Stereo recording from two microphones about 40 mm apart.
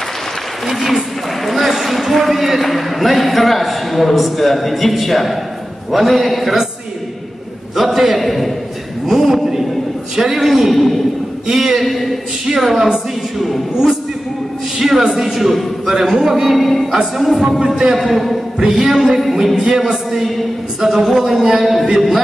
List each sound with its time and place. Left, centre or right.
0.7 s a sound: centre
2.6 s a man's voice: centre
7.7 s a man's voice: centre
9.0 s a sound: centre
10.1 s a man's voice: centre
11.4 s speech: centre
14.8 s a man's voice: centre
17.4 s speech: centre
17.6 s a man's voice: centre
19.5 s speech: centre
19.8 s a man's voice: centre